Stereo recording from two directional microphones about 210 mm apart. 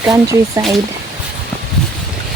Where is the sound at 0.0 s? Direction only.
15° right (ahead or behind).